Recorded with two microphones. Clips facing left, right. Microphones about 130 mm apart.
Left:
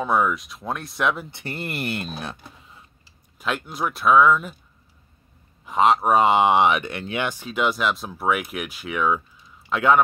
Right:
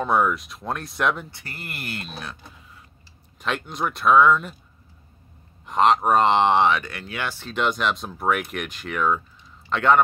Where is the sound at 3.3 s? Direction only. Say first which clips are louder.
Even; 5° left (ahead or behind).